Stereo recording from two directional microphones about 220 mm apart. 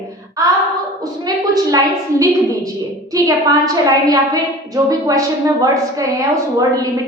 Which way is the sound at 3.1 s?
15° right (ahead or behind).